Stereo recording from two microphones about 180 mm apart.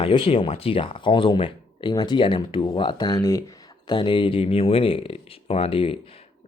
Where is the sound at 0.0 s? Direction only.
30° left (ahead or behind).